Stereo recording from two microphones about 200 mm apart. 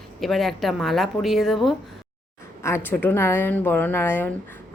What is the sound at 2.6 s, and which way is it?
A woman's voice, 10° left (ahead or behind).